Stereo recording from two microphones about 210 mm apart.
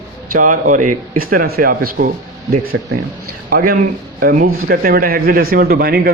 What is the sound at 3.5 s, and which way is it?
Speech, 45° right (ahead or behind).